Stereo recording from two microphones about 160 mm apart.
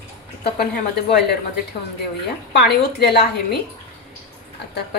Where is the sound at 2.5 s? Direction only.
90° left.